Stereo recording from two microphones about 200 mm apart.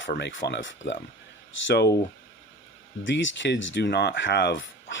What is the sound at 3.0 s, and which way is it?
Speech, 65° left (ahead or behind).